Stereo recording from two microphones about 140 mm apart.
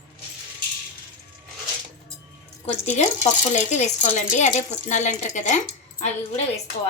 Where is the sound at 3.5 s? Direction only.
55° left (ahead or behind).